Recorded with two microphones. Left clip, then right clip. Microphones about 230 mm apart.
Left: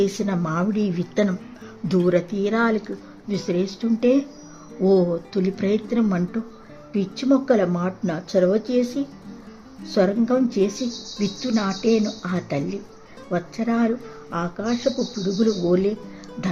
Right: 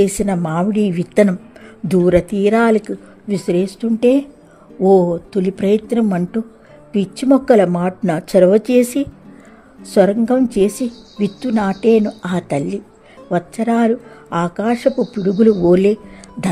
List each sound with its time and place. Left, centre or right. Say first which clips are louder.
0.0 s a woman's voice: right 7 dB; centre